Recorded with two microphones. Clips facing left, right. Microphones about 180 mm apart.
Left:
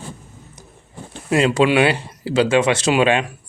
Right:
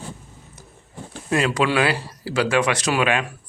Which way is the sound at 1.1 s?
25° left (ahead or behind).